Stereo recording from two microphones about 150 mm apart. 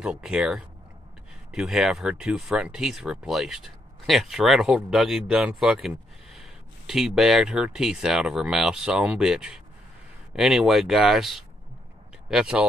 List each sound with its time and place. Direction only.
0.0 s speech: 5° right (ahead or behind)